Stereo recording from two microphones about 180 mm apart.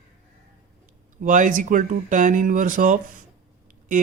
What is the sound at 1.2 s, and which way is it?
Speech, 45° right (ahead or behind).